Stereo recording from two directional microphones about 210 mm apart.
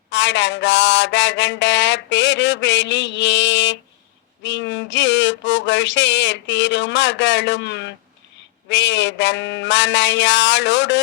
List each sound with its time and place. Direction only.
0.1 s mantra: 60° left (ahead or behind)